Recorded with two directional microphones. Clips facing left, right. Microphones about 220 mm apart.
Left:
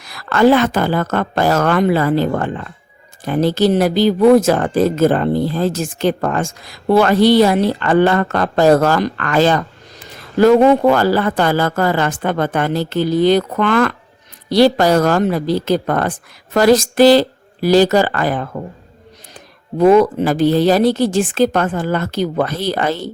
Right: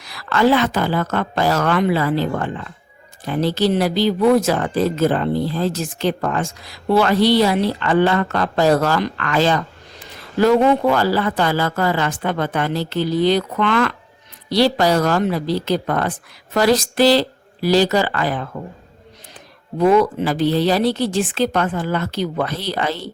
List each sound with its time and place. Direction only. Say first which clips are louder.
0.0 s speech: left 4 dB; 50° left (ahead or behind)
19.8 s speech: left 4 dB; 45° left (ahead or behind)